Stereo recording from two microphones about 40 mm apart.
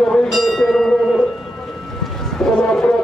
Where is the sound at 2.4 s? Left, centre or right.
Centre.